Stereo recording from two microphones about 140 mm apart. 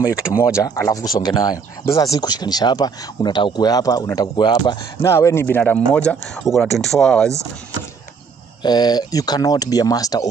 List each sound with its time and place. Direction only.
0.6 s speech: 20° left (ahead or behind)
5.0 s speech: 20° left (ahead or behind); by 7.3 s 5° left (ahead or behind)
8.6 s speech: 30° left (ahead or behind)